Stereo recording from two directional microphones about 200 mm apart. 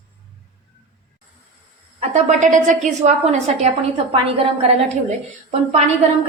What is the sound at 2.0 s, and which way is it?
A woman's voice, 35° right (ahead or behind).